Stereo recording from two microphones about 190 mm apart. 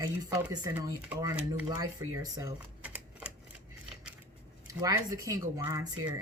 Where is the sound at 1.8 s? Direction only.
20° right (ahead or behind).